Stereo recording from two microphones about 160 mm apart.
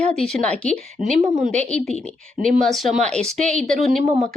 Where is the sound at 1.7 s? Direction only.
5° left (ahead or behind).